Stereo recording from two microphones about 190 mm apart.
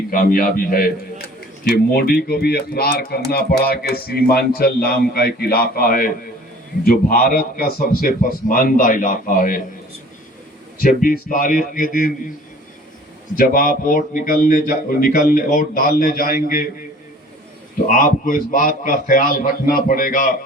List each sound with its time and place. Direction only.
0.1 s speech: 50° left (ahead or behind)
10.8 s speech: 50° left (ahead or behind)
13.3 s speech: 50° left (ahead or behind)
17.8 s speech: 45° left (ahead or behind)